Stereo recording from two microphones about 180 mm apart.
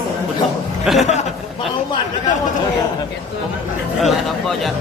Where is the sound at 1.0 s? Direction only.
40° left (ahead or behind).